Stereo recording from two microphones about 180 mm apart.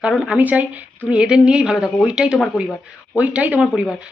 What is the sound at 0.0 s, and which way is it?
Speech, 5° right (ahead or behind).